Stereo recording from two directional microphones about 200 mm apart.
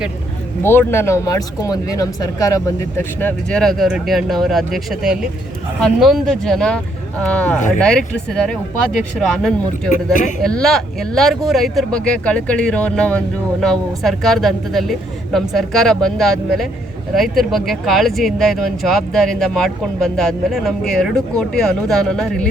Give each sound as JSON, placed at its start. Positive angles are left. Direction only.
{"t": 0.6, "sound": "speech", "side_deg": 10}
{"t": 9.9, "sound": "a man's voice", "side_deg": 40}
{"t": 10.4, "sound": "speech", "side_deg": 5}